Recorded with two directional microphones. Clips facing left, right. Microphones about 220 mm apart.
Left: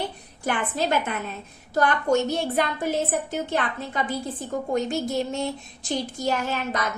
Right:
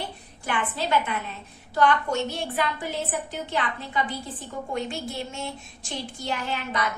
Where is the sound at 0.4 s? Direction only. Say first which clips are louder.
Left 4 dB; 45° left (ahead or behind).